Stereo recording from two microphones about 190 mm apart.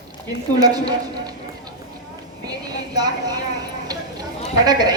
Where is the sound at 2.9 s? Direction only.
20° right (ahead or behind).